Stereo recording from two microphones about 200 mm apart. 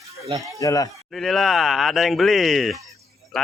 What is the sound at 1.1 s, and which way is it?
Speech, centre (ahead or behind).